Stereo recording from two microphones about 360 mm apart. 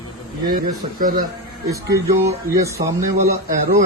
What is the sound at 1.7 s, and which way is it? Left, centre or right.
Speech, centre.